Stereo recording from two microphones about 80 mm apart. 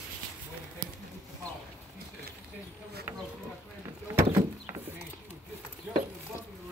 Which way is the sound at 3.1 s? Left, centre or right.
Right.